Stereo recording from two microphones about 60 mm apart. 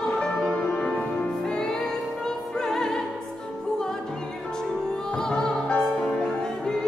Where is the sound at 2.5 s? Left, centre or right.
Centre.